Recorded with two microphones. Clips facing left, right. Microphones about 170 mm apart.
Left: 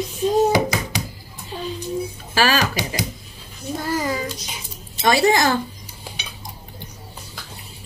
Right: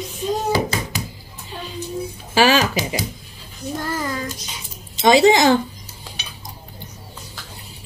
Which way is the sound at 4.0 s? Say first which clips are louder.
Left 2 dB; 10° left (ahead or behind).